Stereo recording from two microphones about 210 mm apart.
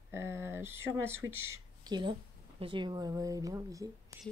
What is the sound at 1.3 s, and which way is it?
Speech, 10° right (ahead or behind).